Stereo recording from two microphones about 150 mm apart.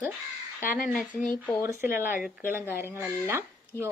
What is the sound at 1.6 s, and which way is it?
Speech, 15° right (ahead or behind).